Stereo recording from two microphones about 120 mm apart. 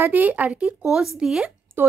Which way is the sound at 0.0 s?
15° right (ahead or behind).